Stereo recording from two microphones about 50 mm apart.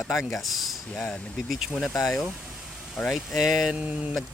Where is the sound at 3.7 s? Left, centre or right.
Right.